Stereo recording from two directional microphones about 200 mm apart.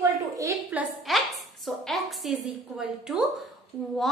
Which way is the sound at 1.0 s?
Centre (ahead or behind).